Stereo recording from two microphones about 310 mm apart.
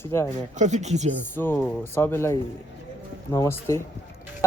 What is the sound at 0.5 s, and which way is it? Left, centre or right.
Speech, right.